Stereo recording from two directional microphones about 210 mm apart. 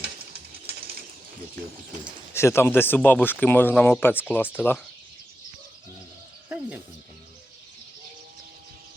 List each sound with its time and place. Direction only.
0.7 s pigeon: 45° right (ahead or behind)
2.3 s speech: 10° left (ahead or behind)
6.5 s a sound: 10° right (ahead or behind)